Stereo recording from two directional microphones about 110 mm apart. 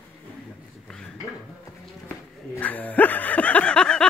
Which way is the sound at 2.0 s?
15° left (ahead or behind).